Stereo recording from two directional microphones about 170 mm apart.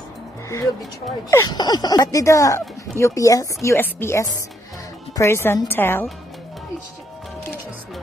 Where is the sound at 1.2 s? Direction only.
20° left (ahead or behind).